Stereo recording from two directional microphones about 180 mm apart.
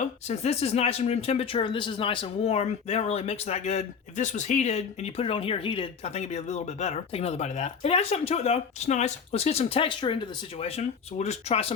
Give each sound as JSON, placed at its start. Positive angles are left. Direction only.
{"t": 0.0, "sound": "speech", "side_deg": 35}